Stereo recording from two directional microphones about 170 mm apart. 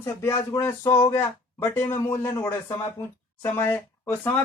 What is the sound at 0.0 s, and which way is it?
Speech, 15° left (ahead or behind).